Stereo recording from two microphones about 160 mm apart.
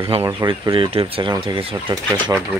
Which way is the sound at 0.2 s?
20° right (ahead or behind).